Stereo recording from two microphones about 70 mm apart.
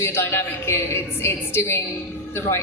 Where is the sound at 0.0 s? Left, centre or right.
Left.